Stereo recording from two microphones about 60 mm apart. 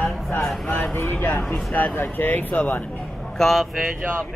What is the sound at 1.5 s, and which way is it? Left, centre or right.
Speech, left.